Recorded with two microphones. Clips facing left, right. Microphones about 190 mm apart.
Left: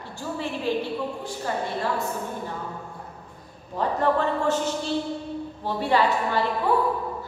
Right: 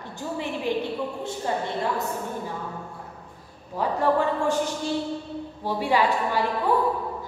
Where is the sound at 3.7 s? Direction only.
10° right (ahead or behind).